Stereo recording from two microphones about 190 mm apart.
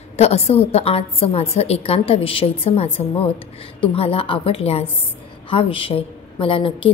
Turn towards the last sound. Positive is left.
turn(degrees=30)  # may be behind; listen again after turning